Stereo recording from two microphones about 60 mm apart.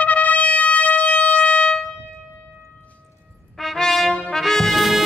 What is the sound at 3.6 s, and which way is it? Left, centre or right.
Brass instrument, centre.